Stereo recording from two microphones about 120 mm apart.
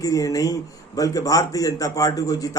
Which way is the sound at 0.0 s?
30° left (ahead or behind).